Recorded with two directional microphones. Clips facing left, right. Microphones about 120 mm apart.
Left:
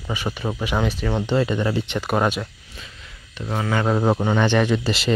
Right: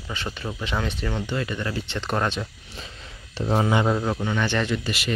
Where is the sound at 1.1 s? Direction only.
25° left (ahead or behind).